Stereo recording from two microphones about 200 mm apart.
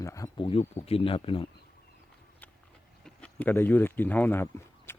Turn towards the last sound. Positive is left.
turn(degrees=10)  # may be behind; listen again after turning